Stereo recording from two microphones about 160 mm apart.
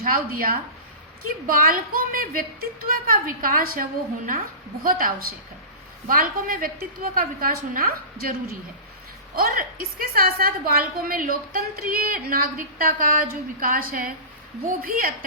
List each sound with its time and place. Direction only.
0.0 s a woman's voice: 65° right (ahead or behind)